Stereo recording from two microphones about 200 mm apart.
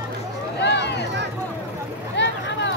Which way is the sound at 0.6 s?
60° left (ahead or behind).